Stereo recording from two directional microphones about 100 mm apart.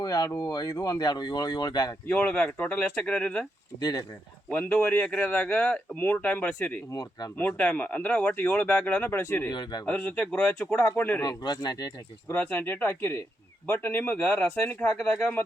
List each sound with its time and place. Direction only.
0.0 s speech: 40° left (ahead or behind)
2.0 s speech: 15° left (ahead or behind)
3.8 s speech: 45° left (ahead or behind)
4.4 s speech: 15° left (ahead or behind)
9.5 s speech: 45° left (ahead or behind)
9.8 s speech: 15° left (ahead or behind)
11.2 s speech: 40° left (ahead or behind)
12.3 s speech: 20° left (ahead or behind)